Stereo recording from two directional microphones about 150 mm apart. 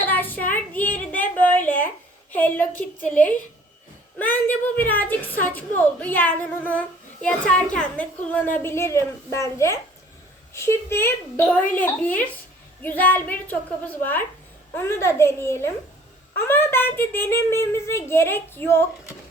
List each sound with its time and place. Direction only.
0.0 s child singing: 15° left (ahead or behind)
2.3 s a woman's voice: 10° left (ahead or behind)